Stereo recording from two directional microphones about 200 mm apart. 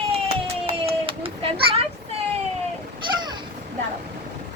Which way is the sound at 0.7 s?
25° right (ahead or behind).